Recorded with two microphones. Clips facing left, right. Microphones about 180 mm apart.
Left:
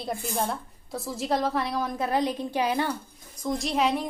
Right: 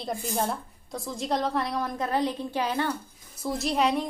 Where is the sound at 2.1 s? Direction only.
15° left (ahead or behind).